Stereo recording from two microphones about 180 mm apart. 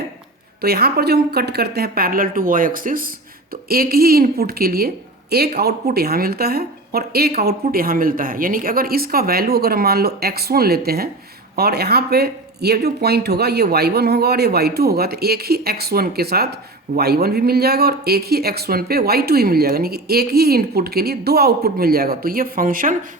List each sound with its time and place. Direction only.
0.6 s speech: 60° right (ahead or behind)